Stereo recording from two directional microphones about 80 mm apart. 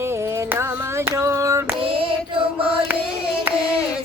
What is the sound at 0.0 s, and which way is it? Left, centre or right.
Female singing, right.